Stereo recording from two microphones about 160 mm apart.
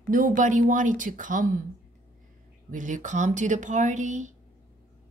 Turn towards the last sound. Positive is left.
turn(degrees=-50)  # may be behind; listen again after turning